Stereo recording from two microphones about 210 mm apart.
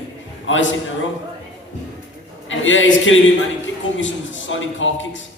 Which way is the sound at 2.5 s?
65° left (ahead or behind).